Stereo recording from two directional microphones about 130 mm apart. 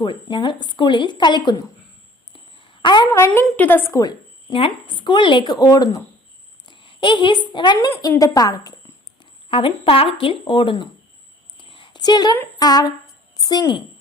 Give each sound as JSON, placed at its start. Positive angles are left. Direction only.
{"t": 0.0, "sound": "speech", "side_deg": 35}
{"t": 2.3, "sound": "a sound", "side_deg": 40}
{"t": 3.1, "sound": "a woman's voice", "side_deg": 20}
{"t": 4.5, "sound": "speech", "side_deg": 40}
{"t": 6.7, "sound": "a woman's voice", "side_deg": 40}
{"t": 9.5, "sound": "speech", "side_deg": 40}
{"t": 11.5, "sound": "a sound", "side_deg": 40}
{"t": 12.5, "sound": "speech", "side_deg": 30}